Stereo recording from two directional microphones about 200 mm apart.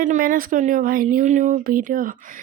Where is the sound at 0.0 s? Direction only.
40° right (ahead or behind).